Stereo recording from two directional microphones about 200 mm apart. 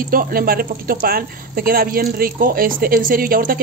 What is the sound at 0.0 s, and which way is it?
A woman's voice, 45° right (ahead or behind).